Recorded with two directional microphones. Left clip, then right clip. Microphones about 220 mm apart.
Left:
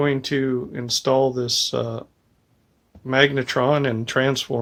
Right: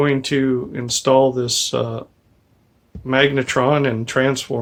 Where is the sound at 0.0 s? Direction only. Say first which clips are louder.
Right 4 dB; 25° left (ahead or behind).